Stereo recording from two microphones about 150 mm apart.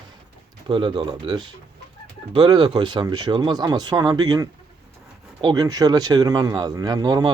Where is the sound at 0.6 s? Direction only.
35° right (ahead or behind).